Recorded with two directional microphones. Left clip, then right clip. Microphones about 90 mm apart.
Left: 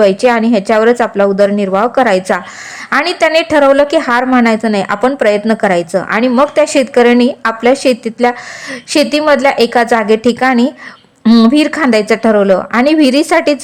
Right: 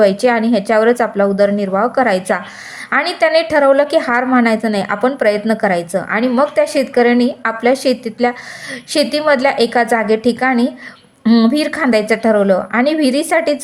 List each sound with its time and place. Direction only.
0.0 s a woman's voice: 30° left (ahead or behind)